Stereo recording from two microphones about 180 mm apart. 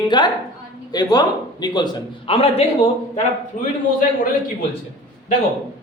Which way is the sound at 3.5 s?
45° left (ahead or behind).